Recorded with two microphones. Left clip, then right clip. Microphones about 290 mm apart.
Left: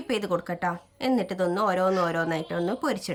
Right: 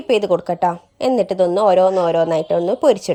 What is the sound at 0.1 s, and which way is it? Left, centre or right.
A woman's voice, centre.